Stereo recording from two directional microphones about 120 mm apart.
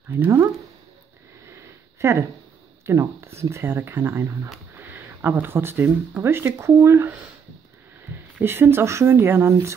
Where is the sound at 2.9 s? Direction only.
20° right (ahead or behind).